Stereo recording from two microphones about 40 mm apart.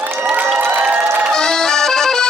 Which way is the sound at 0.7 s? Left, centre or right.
Right.